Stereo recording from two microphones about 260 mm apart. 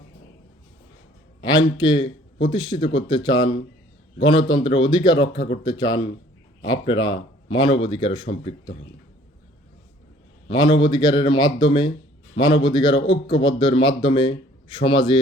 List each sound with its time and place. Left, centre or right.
1.4 s a sound: centre
1.8 s speech: centre
10.5 s speech: centre